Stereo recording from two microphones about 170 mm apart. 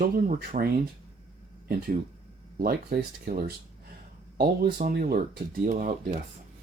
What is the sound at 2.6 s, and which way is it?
Speech, 65° right (ahead or behind).